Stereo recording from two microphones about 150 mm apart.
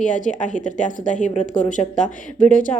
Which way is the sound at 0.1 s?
55° left (ahead or behind).